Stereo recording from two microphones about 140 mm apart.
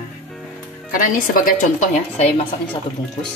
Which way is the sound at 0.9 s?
75° left (ahead or behind).